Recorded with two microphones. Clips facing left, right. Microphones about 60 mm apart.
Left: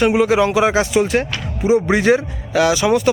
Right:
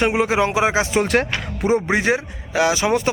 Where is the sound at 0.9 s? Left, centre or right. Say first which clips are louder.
Left 2 dB; right.